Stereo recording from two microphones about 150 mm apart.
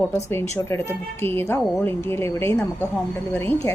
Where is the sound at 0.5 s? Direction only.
15° left (ahead or behind).